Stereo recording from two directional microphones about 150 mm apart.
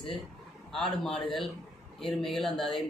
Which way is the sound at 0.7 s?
5° left (ahead or behind).